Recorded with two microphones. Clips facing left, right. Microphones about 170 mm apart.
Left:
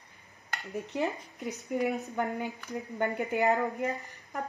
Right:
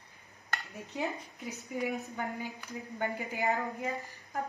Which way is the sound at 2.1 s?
65° left (ahead or behind).